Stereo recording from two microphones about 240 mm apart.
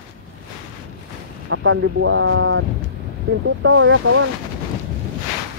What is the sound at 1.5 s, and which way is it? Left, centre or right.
Speech, right.